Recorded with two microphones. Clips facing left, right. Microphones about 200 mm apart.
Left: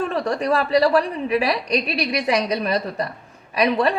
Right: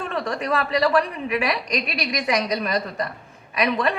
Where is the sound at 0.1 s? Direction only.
35° left (ahead or behind).